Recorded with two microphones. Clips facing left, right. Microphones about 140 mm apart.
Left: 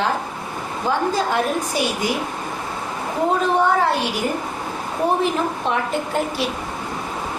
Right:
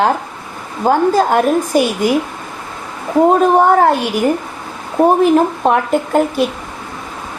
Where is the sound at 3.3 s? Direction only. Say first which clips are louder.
Right 6 dB; 45° right (ahead or behind).